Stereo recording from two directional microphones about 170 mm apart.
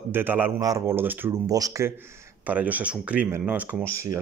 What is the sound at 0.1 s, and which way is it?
Speech, 10° right (ahead or behind).